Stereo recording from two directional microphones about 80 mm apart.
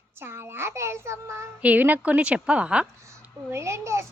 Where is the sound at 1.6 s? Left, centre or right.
Centre.